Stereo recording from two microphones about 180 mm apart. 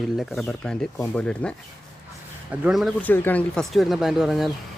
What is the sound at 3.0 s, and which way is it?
Speech, 10° left (ahead or behind).